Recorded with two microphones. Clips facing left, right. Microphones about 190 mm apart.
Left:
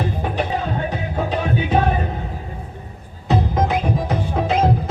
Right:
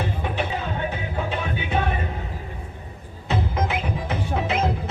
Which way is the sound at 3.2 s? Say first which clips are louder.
Left 6 dB; 40° left (ahead or behind).